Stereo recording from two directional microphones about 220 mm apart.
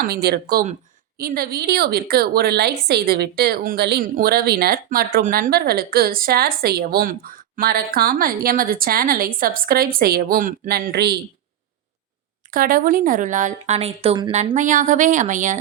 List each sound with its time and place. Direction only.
0.0 s a woman's voice: 45° right (ahead or behind)
12.5 s speech: 40° right (ahead or behind)